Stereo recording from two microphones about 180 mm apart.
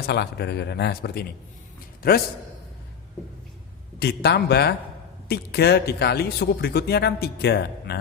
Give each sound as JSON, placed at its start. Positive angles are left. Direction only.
{"t": 0.0, "sound": "a man's voice", "side_deg": 65}
{"t": 4.0, "sound": "speech", "side_deg": 65}